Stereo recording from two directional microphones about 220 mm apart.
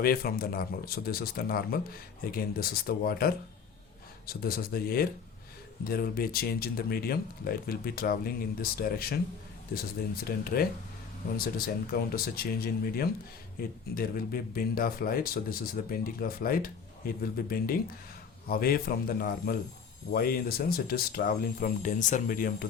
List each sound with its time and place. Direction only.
0.0 s speech: 40° left (ahead or behind)
10.2 s speech: 45° left (ahead or behind)